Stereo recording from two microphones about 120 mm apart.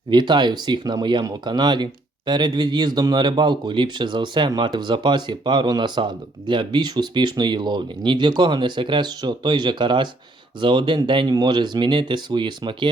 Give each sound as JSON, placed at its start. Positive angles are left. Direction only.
{"t": 0.1, "sound": "speech", "side_deg": -40}